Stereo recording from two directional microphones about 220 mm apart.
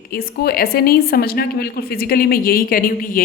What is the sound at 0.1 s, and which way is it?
A woman's voice, 45° left (ahead or behind).